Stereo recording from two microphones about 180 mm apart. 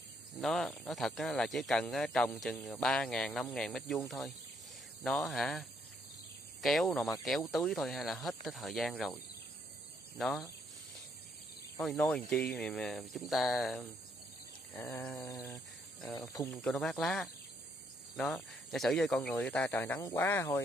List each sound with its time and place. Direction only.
0.4 s speech: centre (ahead or behind)
5.0 s speech: centre (ahead or behind)
11.7 s speech: 5° left (ahead or behind)
14.7 s speech: 10° left (ahead or behind)
15.1 s a sound: 20° left (ahead or behind)
16.2 s speech: 20° left (ahead or behind)
16.5 s speech: centre (ahead or behind)